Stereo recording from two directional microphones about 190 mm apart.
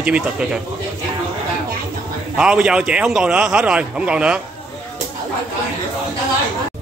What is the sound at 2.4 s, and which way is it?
A man's voice, 5° right (ahead or behind).